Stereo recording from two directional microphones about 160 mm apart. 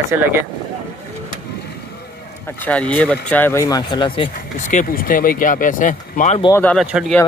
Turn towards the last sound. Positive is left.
turn(degrees=0)  # may be behind; listen again after turning